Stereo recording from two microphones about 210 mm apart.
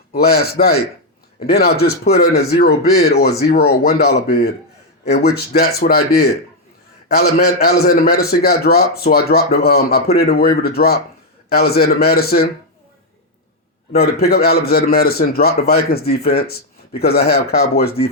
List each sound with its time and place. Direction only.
0.1 s a man's voice: 50° left (ahead or behind)
7.4 s a man's voice: 50° left (ahead or behind)
14.0 s a man's voice: 50° left (ahead or behind)